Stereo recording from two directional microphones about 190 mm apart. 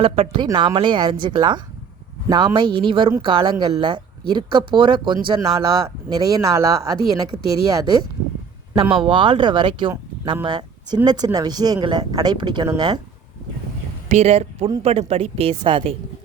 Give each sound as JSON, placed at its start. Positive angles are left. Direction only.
{"t": 0.0, "sound": "speech", "side_deg": -30}
{"t": 9.0, "sound": "speech", "side_deg": -25}
{"t": 14.1, "sound": "a woman's voice", "side_deg": -35}